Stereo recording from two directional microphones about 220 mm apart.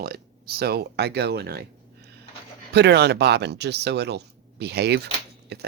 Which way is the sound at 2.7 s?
50° right (ahead or behind).